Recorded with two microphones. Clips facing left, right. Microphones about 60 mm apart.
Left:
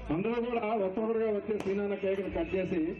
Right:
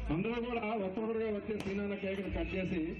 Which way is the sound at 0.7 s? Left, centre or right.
Centre.